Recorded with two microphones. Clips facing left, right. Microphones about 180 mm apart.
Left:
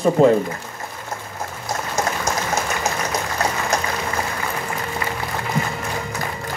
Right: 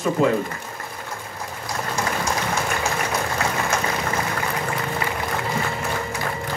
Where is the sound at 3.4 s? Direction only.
40° left (ahead or behind).